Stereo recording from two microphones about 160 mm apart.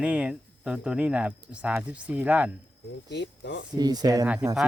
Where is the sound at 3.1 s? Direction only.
90° left.